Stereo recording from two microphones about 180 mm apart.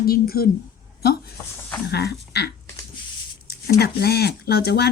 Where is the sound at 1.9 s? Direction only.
65° left (ahead or behind).